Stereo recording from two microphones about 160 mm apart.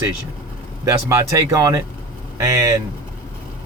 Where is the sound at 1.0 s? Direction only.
20° right (ahead or behind).